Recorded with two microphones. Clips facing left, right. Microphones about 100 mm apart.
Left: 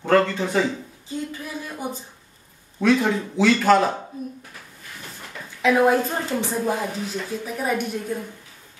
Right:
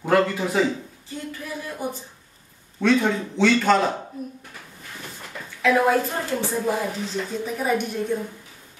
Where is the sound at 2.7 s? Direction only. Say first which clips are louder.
Left 1 dB; 5° left (ahead or behind).